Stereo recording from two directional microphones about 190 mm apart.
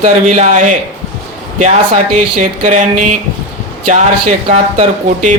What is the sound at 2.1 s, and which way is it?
Speech, 40° right (ahead or behind).